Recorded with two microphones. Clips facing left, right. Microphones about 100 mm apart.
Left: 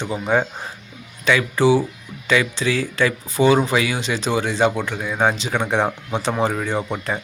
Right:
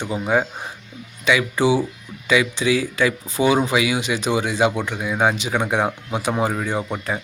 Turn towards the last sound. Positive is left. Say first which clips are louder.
# left 1 dB
turn(degrees=-5)  # may be behind; listen again after turning